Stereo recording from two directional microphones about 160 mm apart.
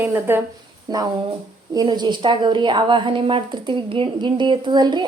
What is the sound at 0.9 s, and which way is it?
A woman's voice, 25° right (ahead or behind).